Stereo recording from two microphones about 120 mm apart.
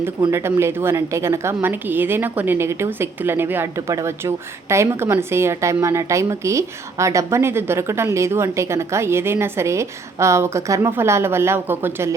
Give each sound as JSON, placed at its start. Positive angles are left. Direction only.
{"t": 0.3, "sound": "a woman's voice", "side_deg": -20}